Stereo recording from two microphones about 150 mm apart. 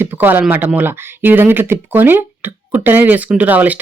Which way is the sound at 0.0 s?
10° right (ahead or behind).